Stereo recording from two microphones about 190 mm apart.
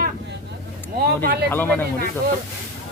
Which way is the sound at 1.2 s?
55° right (ahead or behind).